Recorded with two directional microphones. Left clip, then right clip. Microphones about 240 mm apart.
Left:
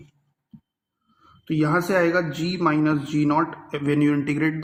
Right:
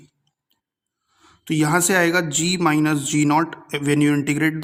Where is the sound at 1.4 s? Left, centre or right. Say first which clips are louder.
Right 3 dB; right.